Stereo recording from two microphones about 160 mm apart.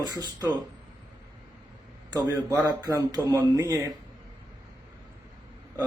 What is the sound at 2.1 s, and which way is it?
Speech, 20° right (ahead or behind).